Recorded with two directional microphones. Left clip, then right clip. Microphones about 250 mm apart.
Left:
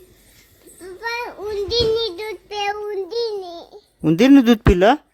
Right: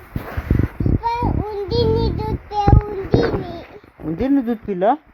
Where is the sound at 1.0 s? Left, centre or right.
Centre.